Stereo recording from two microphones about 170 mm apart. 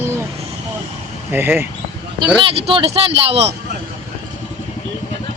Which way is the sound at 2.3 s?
30° right (ahead or behind).